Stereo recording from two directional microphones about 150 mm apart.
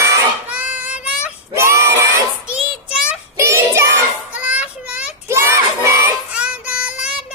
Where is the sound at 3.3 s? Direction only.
20° right (ahead or behind).